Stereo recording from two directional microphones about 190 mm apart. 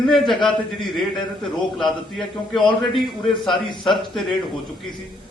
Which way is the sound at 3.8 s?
Centre (ahead or behind).